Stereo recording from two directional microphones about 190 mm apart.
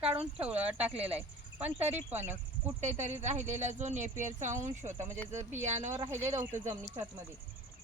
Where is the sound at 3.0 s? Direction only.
40° right (ahead or behind).